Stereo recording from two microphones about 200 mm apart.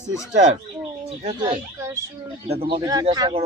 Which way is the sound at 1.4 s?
20° right (ahead or behind).